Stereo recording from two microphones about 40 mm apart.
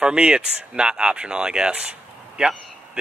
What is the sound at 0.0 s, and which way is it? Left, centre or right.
Speech, right.